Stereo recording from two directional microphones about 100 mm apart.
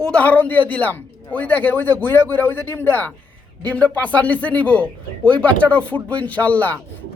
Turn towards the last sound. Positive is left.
turn(degrees=15)  # may be behind; listen again after turning